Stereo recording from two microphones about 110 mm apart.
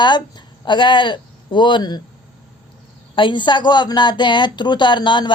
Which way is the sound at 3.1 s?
50° left (ahead or behind).